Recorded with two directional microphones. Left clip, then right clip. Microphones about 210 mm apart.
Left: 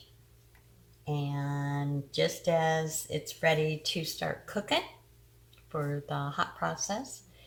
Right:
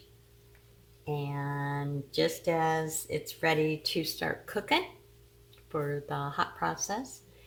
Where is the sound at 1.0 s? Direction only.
35° right (ahead or behind).